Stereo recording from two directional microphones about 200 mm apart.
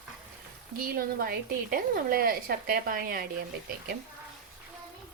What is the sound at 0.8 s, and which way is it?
A woman's voice, 50° right (ahead or behind).